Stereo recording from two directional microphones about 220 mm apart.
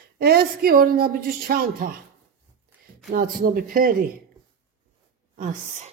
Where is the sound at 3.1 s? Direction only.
40° right (ahead or behind).